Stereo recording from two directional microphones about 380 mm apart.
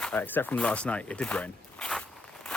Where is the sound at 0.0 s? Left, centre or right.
Centre.